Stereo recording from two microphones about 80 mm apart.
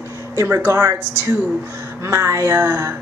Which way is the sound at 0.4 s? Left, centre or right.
Right.